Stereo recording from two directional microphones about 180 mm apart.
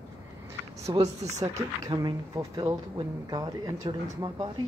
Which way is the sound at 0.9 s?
25° right (ahead or behind).